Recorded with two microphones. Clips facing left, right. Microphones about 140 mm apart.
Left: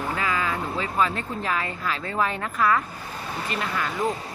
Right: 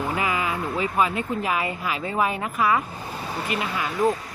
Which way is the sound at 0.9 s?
10° right (ahead or behind).